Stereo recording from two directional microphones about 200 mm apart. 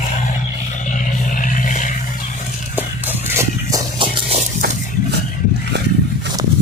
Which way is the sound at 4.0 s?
25° right (ahead or behind).